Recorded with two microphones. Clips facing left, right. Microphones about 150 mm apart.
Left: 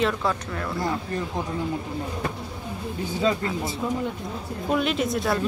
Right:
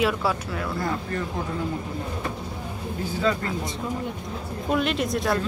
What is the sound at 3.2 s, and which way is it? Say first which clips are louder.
Speech: left 1 dB; 20° left (ahead or behind).